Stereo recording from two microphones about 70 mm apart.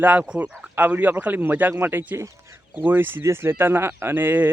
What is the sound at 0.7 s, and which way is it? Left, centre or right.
Speech, right.